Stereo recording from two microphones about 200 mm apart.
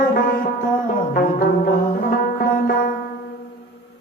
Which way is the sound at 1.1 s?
45° left (ahead or behind).